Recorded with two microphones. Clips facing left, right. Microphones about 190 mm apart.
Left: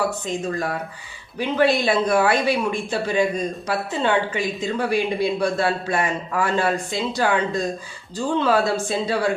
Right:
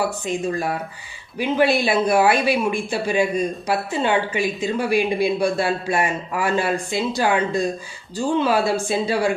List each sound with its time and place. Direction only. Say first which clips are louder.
0.3 s speech: right 2 dB; 10° right (ahead or behind)